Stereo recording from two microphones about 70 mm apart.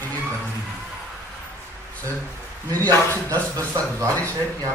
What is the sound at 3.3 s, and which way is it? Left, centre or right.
Speech, right.